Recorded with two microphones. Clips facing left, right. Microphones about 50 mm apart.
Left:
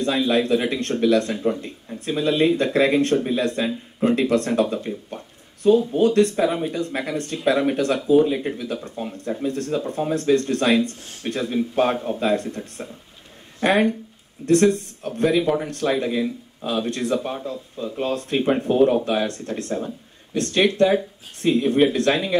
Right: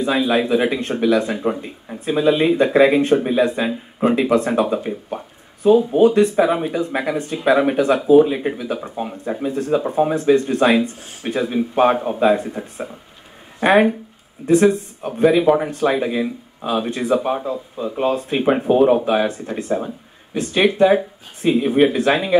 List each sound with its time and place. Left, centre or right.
0.0 s speech: centre